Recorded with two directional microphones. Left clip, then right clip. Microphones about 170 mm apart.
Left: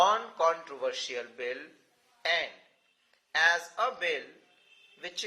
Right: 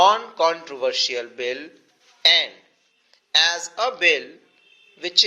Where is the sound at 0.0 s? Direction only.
35° right (ahead or behind).